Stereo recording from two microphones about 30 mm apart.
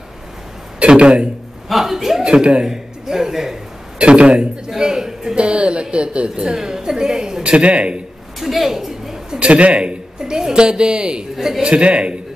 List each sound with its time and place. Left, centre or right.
0.7 s speech: right
1.7 s speech: centre
2.6 s a sound: centre
4.0 s a woman's voice: right
4.6 s a sound: right
5.3 s a woman's voice: right
6.5 s a woman's voice: centre
7.4 s a woman's voice: right
8.4 s a woman's voice: centre
8.7 s a sound: centre
9.4 s a sound: right
10.3 s a woman's voice: right
11.6 s a woman's voice: right